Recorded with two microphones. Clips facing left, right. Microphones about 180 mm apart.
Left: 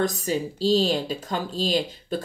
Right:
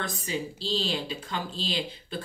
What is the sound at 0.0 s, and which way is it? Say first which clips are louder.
Speech: left 8 dB; 40° left (ahead or behind).